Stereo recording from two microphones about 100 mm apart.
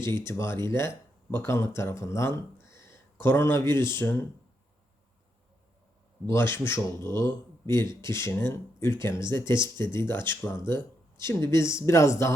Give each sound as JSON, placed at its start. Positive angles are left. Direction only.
{"t": 0.3, "sound": "speech", "side_deg": 25}
{"t": 6.2, "sound": "speech", "side_deg": 25}